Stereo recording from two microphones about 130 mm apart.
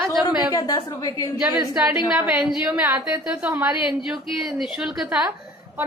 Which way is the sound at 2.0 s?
5° right (ahead or behind).